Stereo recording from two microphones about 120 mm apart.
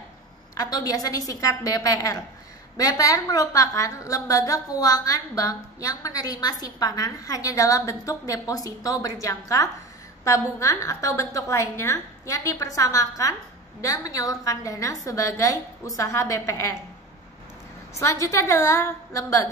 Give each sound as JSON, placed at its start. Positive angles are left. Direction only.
{"t": 0.6, "sound": "a woman's voice", "side_deg": 30}
{"t": 17.9, "sound": "a woman's voice", "side_deg": 25}